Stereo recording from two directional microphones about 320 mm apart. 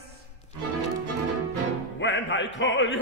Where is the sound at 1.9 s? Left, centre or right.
Left.